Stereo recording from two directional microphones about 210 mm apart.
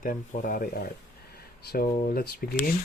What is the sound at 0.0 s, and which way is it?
Speech, 40° left (ahead or behind).